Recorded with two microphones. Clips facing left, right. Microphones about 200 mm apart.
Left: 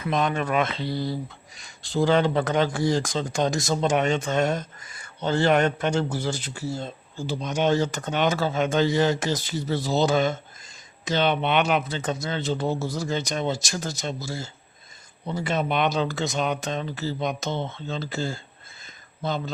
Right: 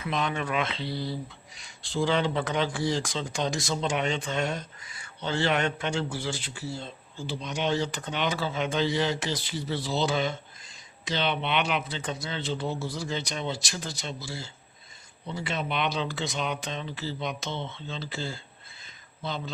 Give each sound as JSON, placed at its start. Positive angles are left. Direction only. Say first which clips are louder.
{"t": 0.0, "sound": "speech", "louder": "left 5 dB", "side_deg": 45}